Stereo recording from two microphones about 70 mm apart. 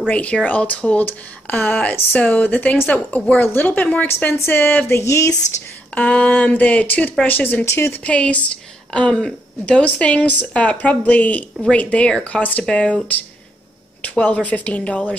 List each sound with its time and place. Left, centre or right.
0.1 s a woman's voice: centre
4.3 s speech: left
5.0 s speech: left
5.9 s a woman's voice: centre
7.6 s speech: left
8.0 s a woman's voice: centre